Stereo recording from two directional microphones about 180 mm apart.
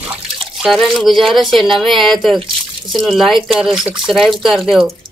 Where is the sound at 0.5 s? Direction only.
Centre (ahead or behind).